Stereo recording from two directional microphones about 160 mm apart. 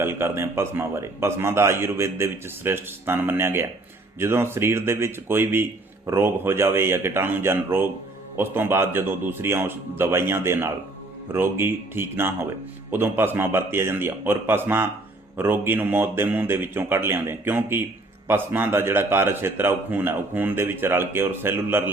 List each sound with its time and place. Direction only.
0.0 s a man's voice: 15° right (ahead or behind)